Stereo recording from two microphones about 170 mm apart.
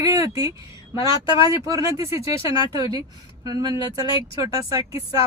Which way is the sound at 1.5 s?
20° right (ahead or behind).